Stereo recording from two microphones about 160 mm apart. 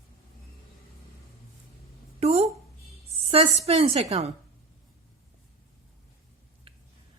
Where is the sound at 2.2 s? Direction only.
40° right (ahead or behind).